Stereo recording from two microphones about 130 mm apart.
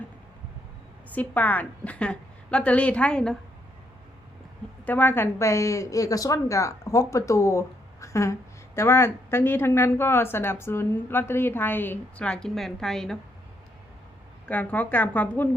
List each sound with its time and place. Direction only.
1.1 s a woman's voice: 10° left (ahead or behind)
4.9 s a woman's voice: 15° left (ahead or behind)
14.4 s a woman's voice: 15° left (ahead or behind)